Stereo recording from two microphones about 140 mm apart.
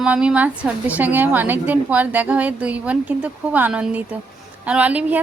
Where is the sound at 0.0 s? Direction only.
5° right (ahead or behind).